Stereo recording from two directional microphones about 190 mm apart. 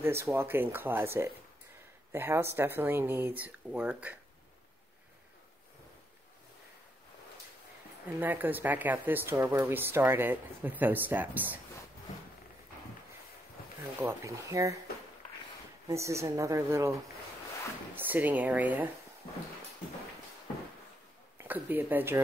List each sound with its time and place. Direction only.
0.0 s speech: 15° right (ahead or behind)
8.2 s speech: 10° right (ahead or behind)
13.9 s speech: 15° right (ahead or behind)
15.9 s speech: 15° right (ahead or behind)
17.9 s speech: 10° right (ahead or behind)
21.4 s speech: 10° right (ahead or behind)